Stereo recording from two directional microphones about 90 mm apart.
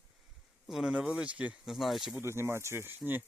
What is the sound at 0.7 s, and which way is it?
Speech, 5° right (ahead or behind).